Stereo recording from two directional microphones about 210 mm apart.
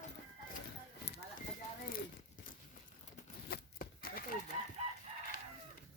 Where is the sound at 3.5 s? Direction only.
45° left (ahead or behind).